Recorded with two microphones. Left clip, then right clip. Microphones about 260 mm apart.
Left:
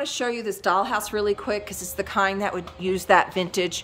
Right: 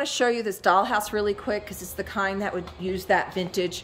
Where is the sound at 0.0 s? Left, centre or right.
Centre.